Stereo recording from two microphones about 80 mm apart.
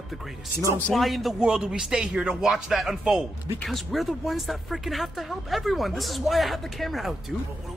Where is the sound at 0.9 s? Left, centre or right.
Centre.